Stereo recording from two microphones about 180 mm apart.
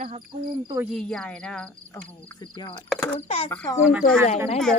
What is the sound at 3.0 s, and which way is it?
Speech, 15° left (ahead or behind).